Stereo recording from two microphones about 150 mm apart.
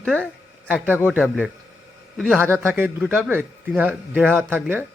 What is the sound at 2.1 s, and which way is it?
A man's voice, centre (ahead or behind).